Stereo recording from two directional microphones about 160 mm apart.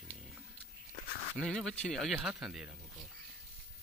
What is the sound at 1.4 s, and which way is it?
Speech, 5° left (ahead or behind).